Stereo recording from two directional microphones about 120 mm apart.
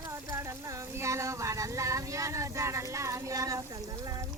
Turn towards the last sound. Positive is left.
turn(degrees=-25)  # may be behind; listen again after turning